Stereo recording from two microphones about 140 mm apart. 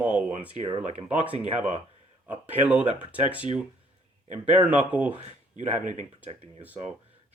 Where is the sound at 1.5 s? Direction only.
55° right (ahead or behind).